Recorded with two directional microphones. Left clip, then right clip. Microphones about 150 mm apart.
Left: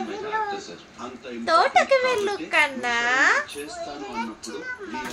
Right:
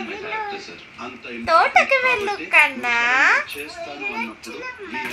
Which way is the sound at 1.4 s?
50° left (ahead or behind).